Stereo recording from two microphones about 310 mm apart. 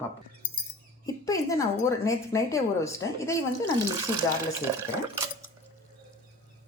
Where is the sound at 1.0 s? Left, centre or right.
Centre.